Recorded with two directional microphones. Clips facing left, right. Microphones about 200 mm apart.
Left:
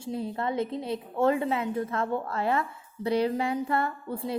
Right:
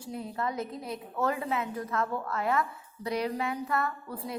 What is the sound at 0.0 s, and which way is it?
A woman's voice, 25° left (ahead or behind).